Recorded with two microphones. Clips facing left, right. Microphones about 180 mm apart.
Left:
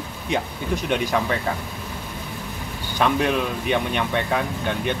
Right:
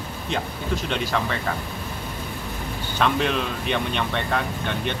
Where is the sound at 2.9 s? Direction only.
10° left (ahead or behind).